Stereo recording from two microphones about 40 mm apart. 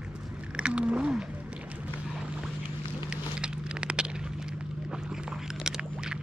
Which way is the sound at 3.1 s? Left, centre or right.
Right.